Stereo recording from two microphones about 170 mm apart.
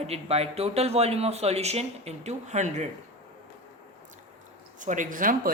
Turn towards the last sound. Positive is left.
turn(degrees=-55)  # may be behind; listen again after turning